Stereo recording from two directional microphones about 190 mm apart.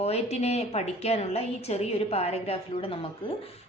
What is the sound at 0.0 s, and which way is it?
A woman's voice, 35° left (ahead or behind).